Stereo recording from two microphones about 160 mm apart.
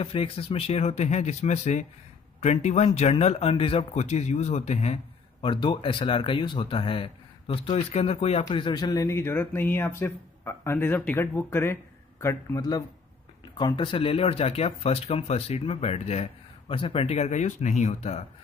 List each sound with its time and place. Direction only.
0.0 s a man's voice: 35° left (ahead or behind)
5.4 s speech: 30° left (ahead or behind)
8.5 s speech: 30° left (ahead or behind); by 18.2 s 45° left (ahead or behind)